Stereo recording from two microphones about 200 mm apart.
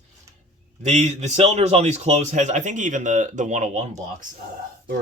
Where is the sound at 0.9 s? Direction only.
35° right (ahead or behind).